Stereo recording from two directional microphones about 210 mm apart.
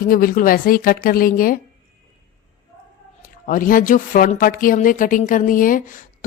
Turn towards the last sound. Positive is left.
turn(degrees=40)  # may be behind; listen again after turning